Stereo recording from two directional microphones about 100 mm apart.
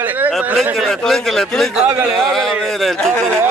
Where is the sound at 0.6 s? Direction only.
5° left (ahead or behind).